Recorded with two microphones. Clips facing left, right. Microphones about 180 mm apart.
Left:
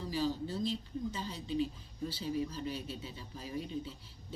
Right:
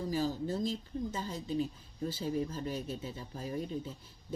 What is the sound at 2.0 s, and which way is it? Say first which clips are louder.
Speech: right 2 dB; 45° right (ahead or behind).